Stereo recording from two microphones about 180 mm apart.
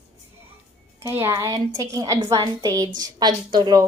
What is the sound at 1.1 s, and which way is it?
A woman's voice, 15° right (ahead or behind).